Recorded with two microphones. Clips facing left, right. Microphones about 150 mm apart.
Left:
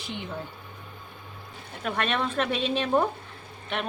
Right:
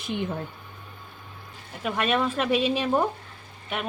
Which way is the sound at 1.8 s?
5° right (ahead or behind).